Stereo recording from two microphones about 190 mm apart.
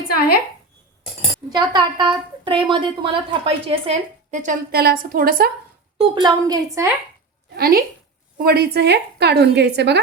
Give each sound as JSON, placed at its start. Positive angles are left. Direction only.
{"t": 1.5, "sound": "a woman's voice", "side_deg": -25}
{"t": 6.0, "sound": "a woman's voice", "side_deg": -25}
{"t": 7.5, "sound": "a woman's voice", "side_deg": -50}